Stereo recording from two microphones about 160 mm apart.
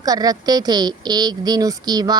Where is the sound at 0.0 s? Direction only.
25° right (ahead or behind).